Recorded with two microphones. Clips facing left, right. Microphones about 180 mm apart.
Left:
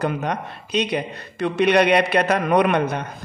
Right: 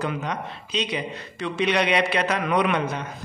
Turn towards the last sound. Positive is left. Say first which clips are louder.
# left 5 dB
turn(degrees=55)  # may be behind; listen again after turning